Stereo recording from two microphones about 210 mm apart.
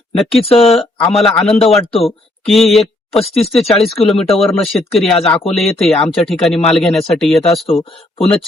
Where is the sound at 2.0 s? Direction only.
Centre (ahead or behind).